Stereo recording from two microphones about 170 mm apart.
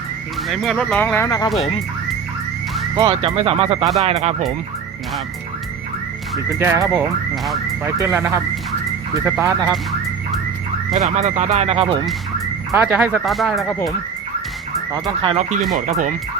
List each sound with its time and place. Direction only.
0.4 s speech: centre (ahead or behind); by 1.5 s 20° left (ahead or behind)
2.9 s speech: 30° right (ahead or behind)
6.6 s speech: 15° right (ahead or behind)
11.0 s speech: 40° right (ahead or behind)
12.7 s speech: 10° right (ahead or behind)
15.2 s speech: 30° right (ahead or behind)
15.7 s speech: 50° right (ahead or behind)